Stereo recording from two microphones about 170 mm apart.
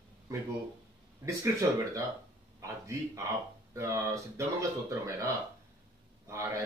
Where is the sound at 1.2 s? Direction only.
20° right (ahead or behind).